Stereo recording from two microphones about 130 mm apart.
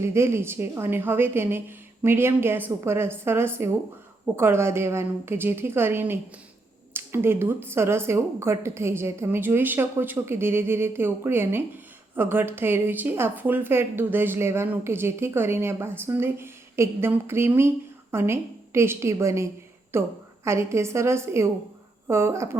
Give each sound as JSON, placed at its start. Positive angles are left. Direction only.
{"t": 0.0, "sound": "a woman's voice", "side_deg": -20}